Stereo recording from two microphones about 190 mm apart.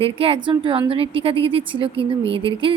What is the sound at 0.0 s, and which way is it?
Speech, 30° right (ahead or behind).